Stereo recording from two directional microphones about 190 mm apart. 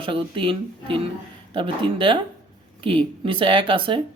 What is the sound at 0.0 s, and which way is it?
Speech, 25° right (ahead or behind).